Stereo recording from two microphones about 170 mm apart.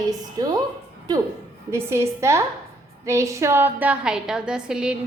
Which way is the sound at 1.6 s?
15° right (ahead or behind).